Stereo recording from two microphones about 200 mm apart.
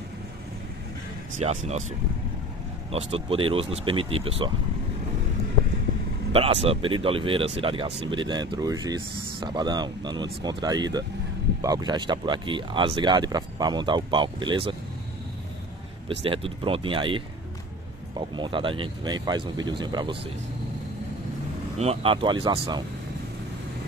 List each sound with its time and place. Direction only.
1.4 s speech: 35° right (ahead or behind)
6.3 s speech: 30° right (ahead or behind)
16.1 s speech: 25° right (ahead or behind)
21.7 s speech: 30° right (ahead or behind)